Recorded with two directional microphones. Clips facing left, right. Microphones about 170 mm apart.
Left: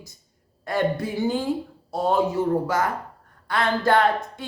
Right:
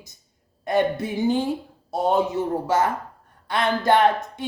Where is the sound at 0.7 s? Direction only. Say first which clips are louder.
Right 2 dB; 20° right (ahead or behind).